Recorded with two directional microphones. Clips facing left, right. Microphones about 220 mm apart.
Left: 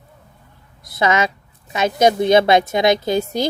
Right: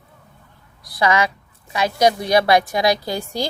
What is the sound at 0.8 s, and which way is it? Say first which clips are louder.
A woman's voice: left 1 dB; 20° left (ahead or behind).